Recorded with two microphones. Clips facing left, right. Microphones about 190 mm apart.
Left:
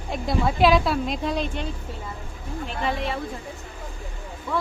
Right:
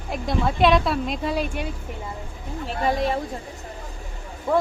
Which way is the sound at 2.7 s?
40° right (ahead or behind).